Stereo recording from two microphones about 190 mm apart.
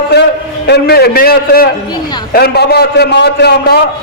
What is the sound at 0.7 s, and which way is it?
A man's voice, 55° left (ahead or behind).